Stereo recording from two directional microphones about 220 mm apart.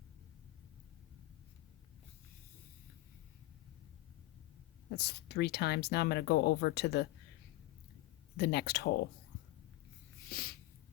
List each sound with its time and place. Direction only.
4.9 s speech: 50° left (ahead or behind)
8.4 s speech: 45° left (ahead or behind)
10.2 s a sound: 45° left (ahead or behind)